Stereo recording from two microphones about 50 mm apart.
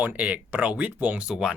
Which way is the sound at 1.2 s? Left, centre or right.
Centre.